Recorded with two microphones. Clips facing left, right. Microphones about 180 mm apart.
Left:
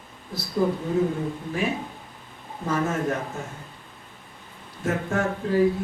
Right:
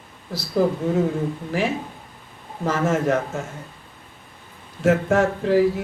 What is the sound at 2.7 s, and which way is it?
Speech, 90° right.